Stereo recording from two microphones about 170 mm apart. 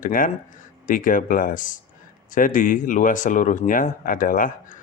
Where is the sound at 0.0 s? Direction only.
55° left (ahead or behind).